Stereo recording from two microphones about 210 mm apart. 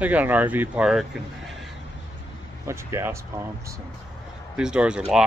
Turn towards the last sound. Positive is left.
turn(degrees=-5)  # may be behind; listen again after turning